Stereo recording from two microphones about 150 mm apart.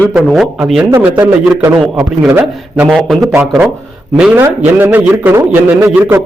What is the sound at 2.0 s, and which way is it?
A man's voice, 5° right (ahead or behind).